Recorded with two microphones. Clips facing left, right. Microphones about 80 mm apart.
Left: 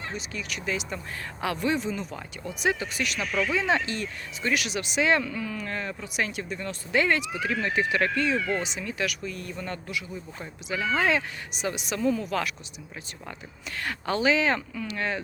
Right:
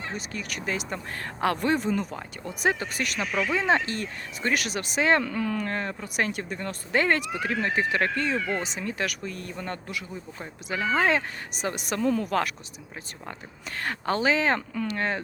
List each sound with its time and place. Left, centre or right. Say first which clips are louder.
0.1 s speech: right 1 dB; right
5.2 s speech: right 4 dB; right
13.7 s speech: right 1 dB; right